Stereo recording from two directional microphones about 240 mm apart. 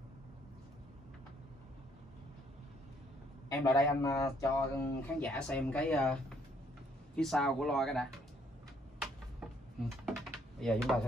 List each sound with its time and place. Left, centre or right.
3.4 s speech: centre
9.0 s a sound: centre
10.6 s speech: centre